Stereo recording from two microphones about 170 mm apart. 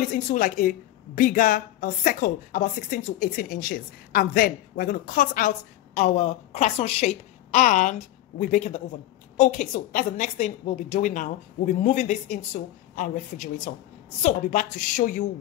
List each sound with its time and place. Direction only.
0.1 s a woman's voice: 50° left (ahead or behind)
5.9 s a woman's voice: 40° left (ahead or behind)